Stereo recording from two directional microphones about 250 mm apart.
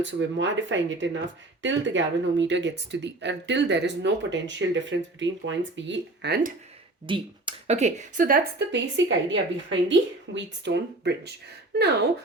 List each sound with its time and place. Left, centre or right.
0.0 s speech: right
7.1 s speech: right